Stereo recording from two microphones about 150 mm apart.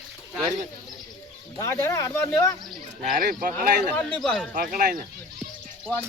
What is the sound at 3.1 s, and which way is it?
Speech, 70° right (ahead or behind).